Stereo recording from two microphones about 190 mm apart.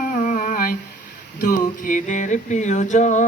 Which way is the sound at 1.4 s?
45° left (ahead or behind).